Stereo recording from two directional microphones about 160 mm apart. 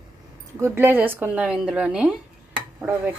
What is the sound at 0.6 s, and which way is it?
A woman's voice, 15° right (ahead or behind).